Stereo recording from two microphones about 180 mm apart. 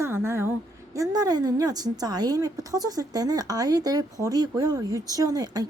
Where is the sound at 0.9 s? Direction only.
20° right (ahead or behind).